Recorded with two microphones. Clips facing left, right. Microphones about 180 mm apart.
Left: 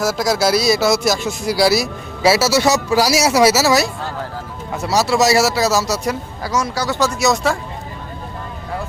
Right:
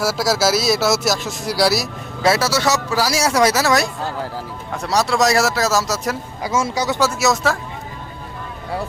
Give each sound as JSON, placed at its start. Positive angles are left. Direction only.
{"t": 0.0, "sound": "speech", "side_deg": -5}
{"t": 6.4, "sound": "speech", "side_deg": -25}
{"t": 7.0, "sound": "speech", "side_deg": -5}